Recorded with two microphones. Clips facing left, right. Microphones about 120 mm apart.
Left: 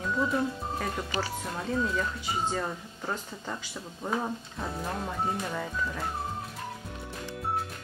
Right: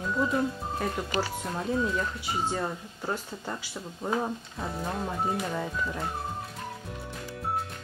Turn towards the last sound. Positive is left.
turn(degrees=-5)  # may be behind; listen again after turning